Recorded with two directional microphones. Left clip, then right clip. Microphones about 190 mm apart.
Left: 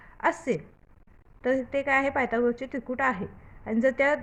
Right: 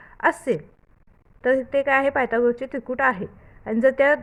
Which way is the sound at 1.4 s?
40° right (ahead or behind).